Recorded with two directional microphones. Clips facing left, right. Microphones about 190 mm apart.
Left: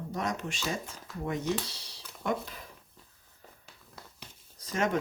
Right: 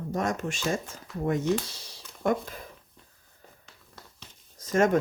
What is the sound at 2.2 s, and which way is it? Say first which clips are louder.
Speech: right 6 dB; 45° right (ahead or behind).